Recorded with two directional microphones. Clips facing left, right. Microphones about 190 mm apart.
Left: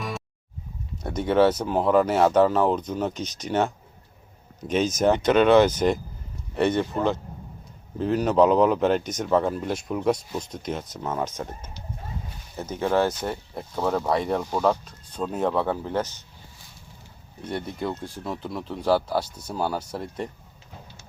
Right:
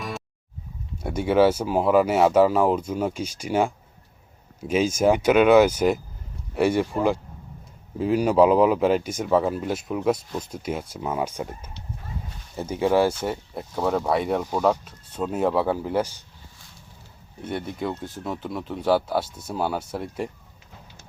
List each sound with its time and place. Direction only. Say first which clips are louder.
1.0 s speech: right 1 dB; 5° right (ahead or behind)
4.7 s speech: right 1 dB; 5° right (ahead or behind)
17.5 s speech: right 1 dB; centre (ahead or behind)
19.2 s speech: right 2 dB; 25° right (ahead or behind)
19.5 s speech: right 1 dB; centre (ahead or behind)